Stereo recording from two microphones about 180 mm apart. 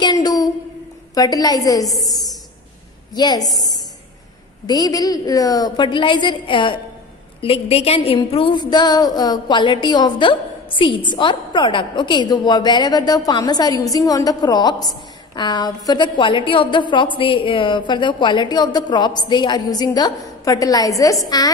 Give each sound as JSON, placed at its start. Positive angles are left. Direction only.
{"t": 0.0, "sound": "a sound", "side_deg": 20}
{"t": 1.1, "sound": "a woman's voice", "side_deg": 20}
{"t": 3.2, "sound": "a woman's voice", "side_deg": 20}
{"t": 4.6, "sound": "a woman's voice", "side_deg": 20}